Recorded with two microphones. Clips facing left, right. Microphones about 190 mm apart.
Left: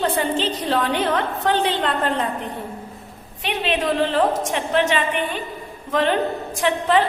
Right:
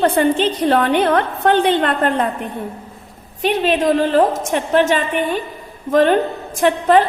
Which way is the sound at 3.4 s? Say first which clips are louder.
Right 7 dB; 40° right (ahead or behind).